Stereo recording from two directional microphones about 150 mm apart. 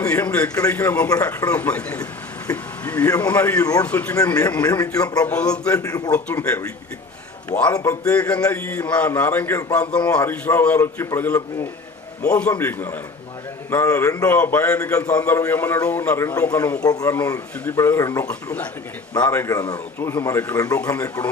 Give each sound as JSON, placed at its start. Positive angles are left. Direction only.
{"t": 0.0, "sound": "a man's voice", "side_deg": 10}
{"t": 4.6, "sound": "speech", "side_deg": 25}
{"t": 5.3, "sound": "a man's voice", "side_deg": 10}
{"t": 5.8, "sound": "speech", "side_deg": 25}
{"t": 7.7, "sound": "speech", "side_deg": 20}
{"t": 8.0, "sound": "a man's voice", "side_deg": 10}
{"t": 15.1, "sound": "a man's voice", "side_deg": 10}
{"t": 16.8, "sound": "a man's voice", "side_deg": 25}